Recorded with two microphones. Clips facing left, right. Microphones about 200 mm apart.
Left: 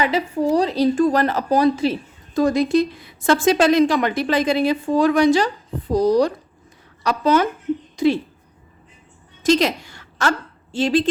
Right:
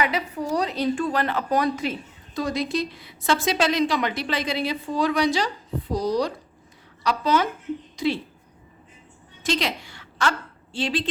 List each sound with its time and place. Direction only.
0.0 s a woman's voice: 30° left (ahead or behind)
2.3 s a woman's voice: 50° left (ahead or behind)
9.4 s a woman's voice: 45° left (ahead or behind)